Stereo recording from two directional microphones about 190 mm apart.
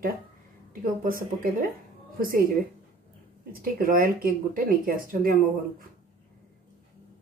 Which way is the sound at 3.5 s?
50° right (ahead or behind).